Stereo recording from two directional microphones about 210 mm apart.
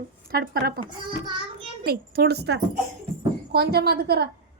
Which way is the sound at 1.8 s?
45° right (ahead or behind).